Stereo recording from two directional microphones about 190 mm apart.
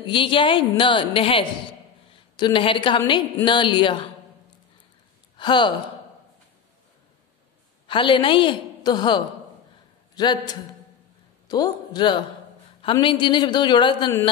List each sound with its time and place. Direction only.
0.0 s a woman's voice: 25° left (ahead or behind)
5.4 s speech: 25° left (ahead or behind)
7.8 s a woman's voice: 25° left (ahead or behind)